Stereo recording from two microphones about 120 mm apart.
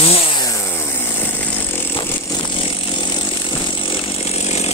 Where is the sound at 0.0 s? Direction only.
60° left (ahead or behind).